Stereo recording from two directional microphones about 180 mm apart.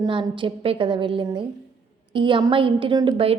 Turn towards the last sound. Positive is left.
turn(degrees=-30)  # may be behind; listen again after turning